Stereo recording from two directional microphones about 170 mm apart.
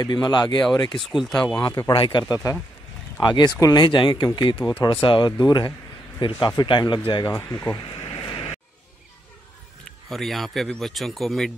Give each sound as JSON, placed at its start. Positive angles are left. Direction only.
{"t": 0.0, "sound": "speech", "side_deg": 25}
{"t": 1.0, "sound": "speech", "side_deg": 0}
{"t": 1.5, "sound": "speech", "side_deg": 20}
{"t": 7.3, "sound": "speech", "side_deg": 15}
{"t": 8.1, "sound": "a sound", "side_deg": 30}
{"t": 10.0, "sound": "speech", "side_deg": 0}